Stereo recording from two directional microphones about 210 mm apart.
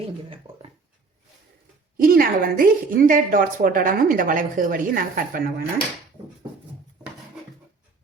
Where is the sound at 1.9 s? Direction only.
45° right (ahead or behind).